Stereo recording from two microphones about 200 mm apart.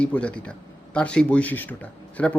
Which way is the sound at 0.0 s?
5° left (ahead or behind).